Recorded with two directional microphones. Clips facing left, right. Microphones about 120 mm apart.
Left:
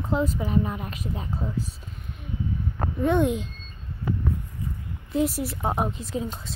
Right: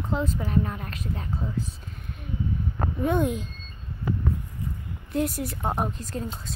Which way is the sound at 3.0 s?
Centre (ahead or behind).